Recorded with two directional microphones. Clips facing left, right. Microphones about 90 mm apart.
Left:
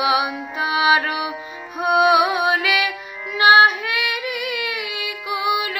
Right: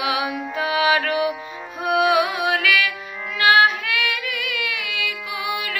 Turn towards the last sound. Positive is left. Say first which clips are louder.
# left 5 dB
turn(degrees=20)  # may be behind; listen again after turning